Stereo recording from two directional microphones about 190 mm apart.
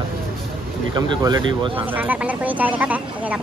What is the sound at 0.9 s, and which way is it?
Speech, 20° right (ahead or behind).